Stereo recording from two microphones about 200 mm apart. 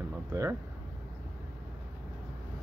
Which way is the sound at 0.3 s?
15° right (ahead or behind).